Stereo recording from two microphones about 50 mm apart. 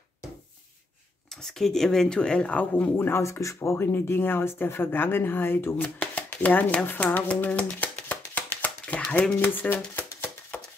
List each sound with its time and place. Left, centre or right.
1.3 s speech: centre; by 2.6 s left
3.0 s speech: left
3.3 s speech: left
3.7 s speech: left
5.9 s speech: left
7.4 s a sound: left
9.3 s speech: left
9.9 s a sound: left